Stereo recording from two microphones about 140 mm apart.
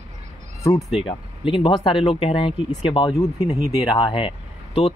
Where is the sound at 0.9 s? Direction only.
40° left (ahead or behind).